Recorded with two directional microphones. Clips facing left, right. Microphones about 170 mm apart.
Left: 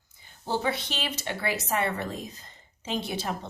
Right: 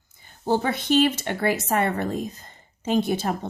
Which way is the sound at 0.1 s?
50° right (ahead or behind).